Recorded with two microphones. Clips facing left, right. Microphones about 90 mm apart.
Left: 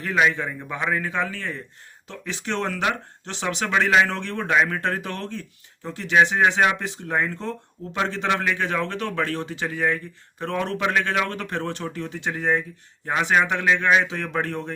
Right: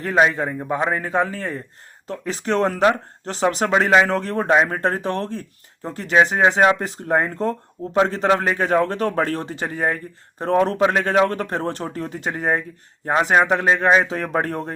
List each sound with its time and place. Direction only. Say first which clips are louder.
0.0 s a man's voice: right 4 dB; 40° right (ahead or behind)